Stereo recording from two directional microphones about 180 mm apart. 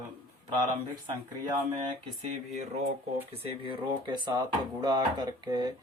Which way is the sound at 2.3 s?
35° right (ahead or behind).